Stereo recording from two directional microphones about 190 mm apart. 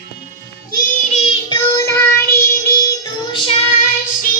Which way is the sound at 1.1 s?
30° left (ahead or behind).